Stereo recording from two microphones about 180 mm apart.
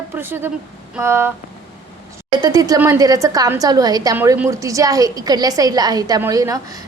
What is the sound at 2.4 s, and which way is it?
A woman's voice, 20° right (ahead or behind).